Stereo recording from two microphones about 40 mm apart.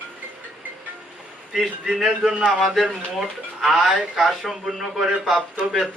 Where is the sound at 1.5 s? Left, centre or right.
Centre.